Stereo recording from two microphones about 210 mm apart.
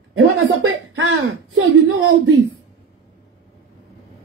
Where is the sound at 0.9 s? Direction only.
70° right (ahead or behind).